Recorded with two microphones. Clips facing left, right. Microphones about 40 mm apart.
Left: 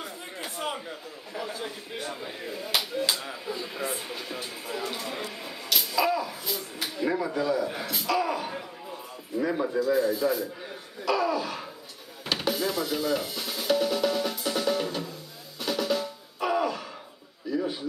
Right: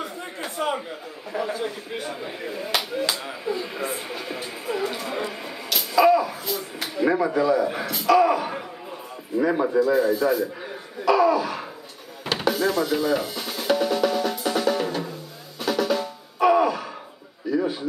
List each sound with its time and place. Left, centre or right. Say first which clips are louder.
0.0 s a sound: right 5 dB; centre
1.4 s speech: right 7 dB; centre
5.7 s a sound: right 8 dB; centre
7.1 s speech: right 7 dB; centre
7.8 s speech: right 9 dB; centre
11.1 s laughter: right 7 dB; centre
12.4 s music: right 7 dB; centre
12.9 s drum: right 5 dB; centre